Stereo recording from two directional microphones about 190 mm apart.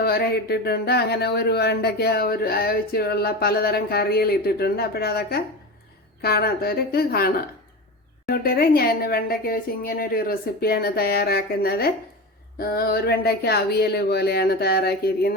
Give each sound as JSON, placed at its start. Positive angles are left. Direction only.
{"t": 0.0, "sound": "a woman's voice", "side_deg": 55}